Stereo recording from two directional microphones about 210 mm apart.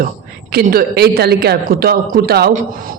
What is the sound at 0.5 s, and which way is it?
Speech, 45° right (ahead or behind).